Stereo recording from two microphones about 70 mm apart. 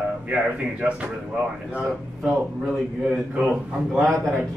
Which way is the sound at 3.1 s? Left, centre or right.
Centre.